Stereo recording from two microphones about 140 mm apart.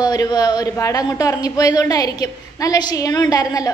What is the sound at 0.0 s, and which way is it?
A woman's voice, 30° left (ahead or behind).